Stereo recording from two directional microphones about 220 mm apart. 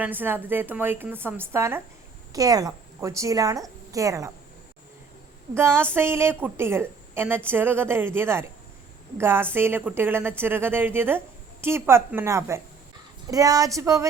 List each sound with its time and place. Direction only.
0.0 s a woman's voice: 10° right (ahead or behind)
5.5 s a woman's voice: 10° right (ahead or behind)